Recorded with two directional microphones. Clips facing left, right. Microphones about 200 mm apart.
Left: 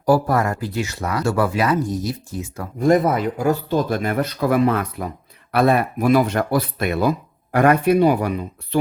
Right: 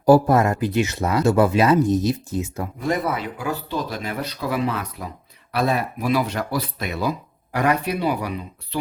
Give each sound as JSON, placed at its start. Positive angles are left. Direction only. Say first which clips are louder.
{"t": 0.0, "sound": "speech", "louder": "right 3 dB", "side_deg": -25}
{"t": 2.8, "sound": "speech", "louder": "left 8 dB", "side_deg": 45}